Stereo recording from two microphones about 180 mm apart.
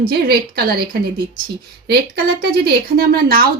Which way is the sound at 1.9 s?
60° right (ahead or behind).